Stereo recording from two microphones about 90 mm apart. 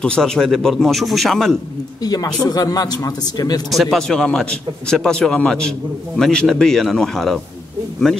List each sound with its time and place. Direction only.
0.0 s speech: 10° left (ahead or behind)
2.0 s speech: 45° left (ahead or behind)
3.7 s speech: centre (ahead or behind)